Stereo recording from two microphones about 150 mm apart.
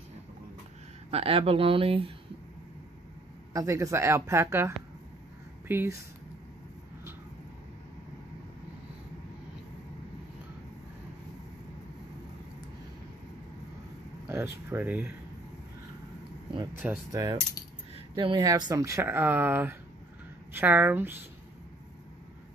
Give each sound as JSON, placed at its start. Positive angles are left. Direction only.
{"t": 1.1, "sound": "speech", "side_deg": -40}
{"t": 3.5, "sound": "speech", "side_deg": -20}
{"t": 14.2, "sound": "speech", "side_deg": -20}
{"t": 17.1, "sound": "speech", "side_deg": -25}